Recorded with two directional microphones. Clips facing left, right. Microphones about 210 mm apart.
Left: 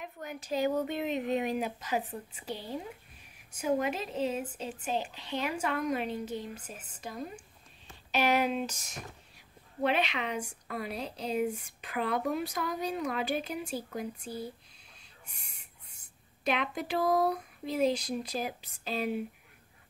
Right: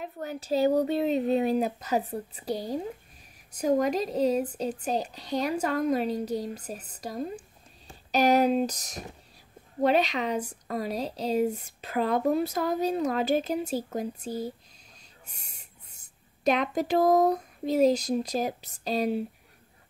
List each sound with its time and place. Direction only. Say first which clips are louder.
0.0 s speech: right 6 dB; 35° right (ahead or behind)
15.0 s a sound: right 2 dB; 35° right (ahead or behind)
16.4 s speech: right 7 dB; 40° right (ahead or behind)